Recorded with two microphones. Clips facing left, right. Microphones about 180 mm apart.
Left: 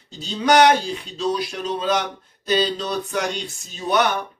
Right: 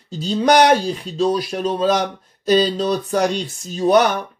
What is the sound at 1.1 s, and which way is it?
A man's voice, 45° right (ahead or behind).